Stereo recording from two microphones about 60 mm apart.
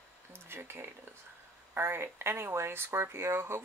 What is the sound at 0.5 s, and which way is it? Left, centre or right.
Speech, right.